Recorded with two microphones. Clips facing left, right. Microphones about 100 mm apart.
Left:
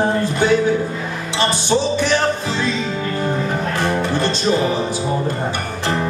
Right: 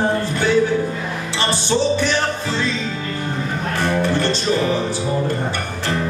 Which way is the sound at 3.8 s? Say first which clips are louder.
Right 2 dB; 15° left (ahead or behind).